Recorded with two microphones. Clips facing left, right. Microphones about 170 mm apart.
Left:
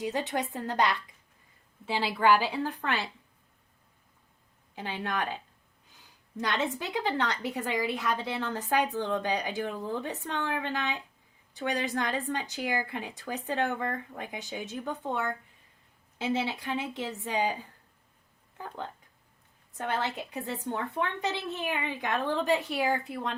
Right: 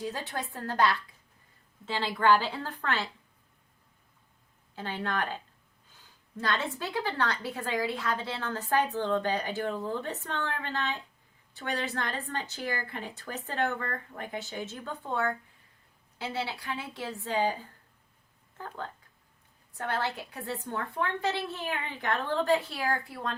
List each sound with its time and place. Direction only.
0.0 s a woman's voice: 20° left (ahead or behind)
4.7 s a woman's voice: 15° left (ahead or behind)